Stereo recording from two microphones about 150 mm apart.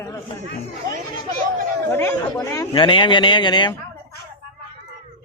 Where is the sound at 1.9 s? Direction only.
20° left (ahead or behind).